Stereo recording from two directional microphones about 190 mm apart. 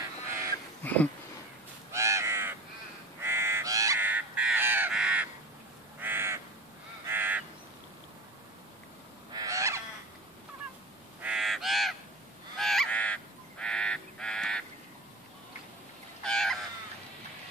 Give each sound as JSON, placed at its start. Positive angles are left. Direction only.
{"t": 0.8, "sound": "a sound", "side_deg": 10}
{"t": 1.9, "sound": "crow", "side_deg": -15}
{"t": 9.3, "sound": "goose", "side_deg": -20}
{"t": 11.1, "sound": "crow", "side_deg": -5}
{"t": 12.5, "sound": "goose", "side_deg": 0}
{"t": 16.3, "sound": "a sound", "side_deg": 5}